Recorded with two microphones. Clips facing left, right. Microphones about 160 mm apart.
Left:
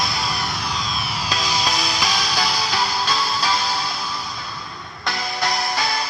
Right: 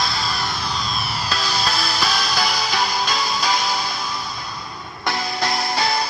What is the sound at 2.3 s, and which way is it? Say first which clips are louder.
Music: right 1 dB; 10° right (ahead or behind).